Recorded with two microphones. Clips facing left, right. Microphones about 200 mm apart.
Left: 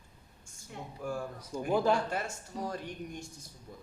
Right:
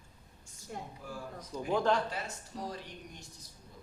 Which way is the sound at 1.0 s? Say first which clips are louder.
Left 8 dB; 50° left (ahead or behind).